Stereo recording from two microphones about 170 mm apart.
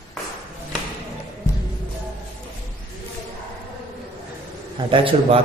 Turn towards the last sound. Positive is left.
turn(degrees=-35)  # may be behind; listen again after turning